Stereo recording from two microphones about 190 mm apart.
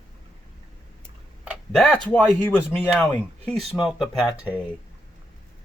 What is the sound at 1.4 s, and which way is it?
Tick-tock, 5° right (ahead or behind).